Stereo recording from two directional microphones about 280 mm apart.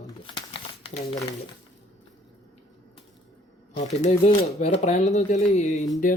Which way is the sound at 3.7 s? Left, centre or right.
Left.